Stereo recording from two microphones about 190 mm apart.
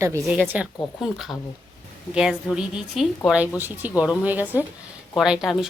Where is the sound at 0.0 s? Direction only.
15° right (ahead or behind).